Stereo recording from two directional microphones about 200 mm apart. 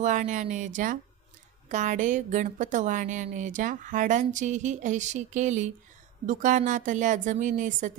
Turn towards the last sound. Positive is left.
turn(degrees=-40)  # may be behind; listen again after turning